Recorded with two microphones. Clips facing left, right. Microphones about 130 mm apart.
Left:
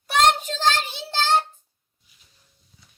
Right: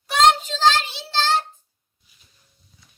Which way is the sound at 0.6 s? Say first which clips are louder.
Right 4 dB; 55° left (ahead or behind).